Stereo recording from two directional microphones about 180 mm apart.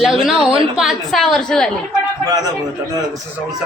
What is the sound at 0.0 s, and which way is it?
A man's voice, centre (ahead or behind).